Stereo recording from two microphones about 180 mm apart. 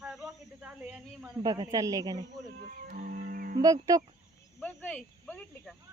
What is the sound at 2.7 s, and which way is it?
Music, 50° right (ahead or behind).